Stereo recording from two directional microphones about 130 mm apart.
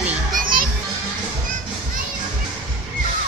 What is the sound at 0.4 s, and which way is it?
Music, 90° right.